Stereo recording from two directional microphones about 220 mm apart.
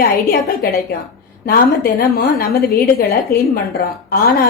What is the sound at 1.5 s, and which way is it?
A woman's voice, 45° left (ahead or behind).